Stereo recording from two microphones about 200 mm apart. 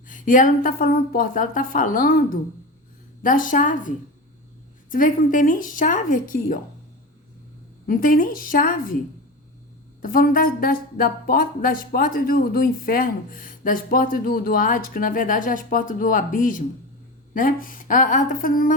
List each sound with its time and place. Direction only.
0.1 s speech: 40° left (ahead or behind)
7.9 s speech: 45° left (ahead or behind)
10.0 s speech: 45° left (ahead or behind)